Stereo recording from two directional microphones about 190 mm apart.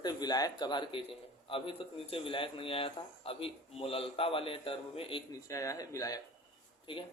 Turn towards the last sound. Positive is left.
turn(degrees=25)  # may be behind; listen again after turning